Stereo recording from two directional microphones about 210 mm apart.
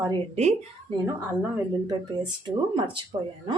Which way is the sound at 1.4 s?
10° right (ahead or behind).